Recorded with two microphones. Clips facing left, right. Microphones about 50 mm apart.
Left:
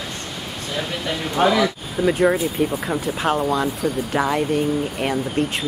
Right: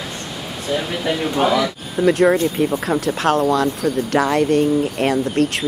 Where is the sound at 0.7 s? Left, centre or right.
Centre.